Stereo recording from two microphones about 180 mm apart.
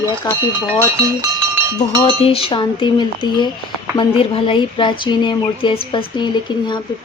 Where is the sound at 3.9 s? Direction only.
30° left (ahead or behind).